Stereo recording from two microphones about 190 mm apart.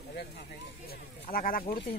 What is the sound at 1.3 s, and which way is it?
Speech, 50° left (ahead or behind).